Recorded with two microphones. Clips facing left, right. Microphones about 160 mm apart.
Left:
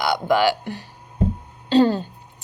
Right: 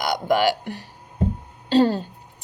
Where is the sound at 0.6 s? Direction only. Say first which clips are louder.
Left 1 dB; 25° left (ahead or behind).